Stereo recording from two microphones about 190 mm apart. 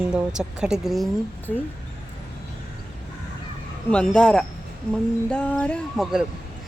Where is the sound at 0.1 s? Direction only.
5° right (ahead or behind).